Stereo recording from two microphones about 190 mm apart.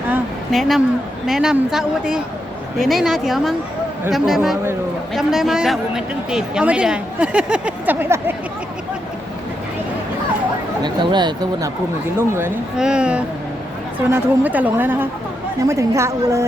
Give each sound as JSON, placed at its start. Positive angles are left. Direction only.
{"t": 0.1, "sound": "a sound", "side_deg": 0}
{"t": 1.3, "sound": "a man's voice", "side_deg": -5}
{"t": 10.8, "sound": "speech", "side_deg": -25}
{"t": 12.3, "sound": "a man's voice", "side_deg": -10}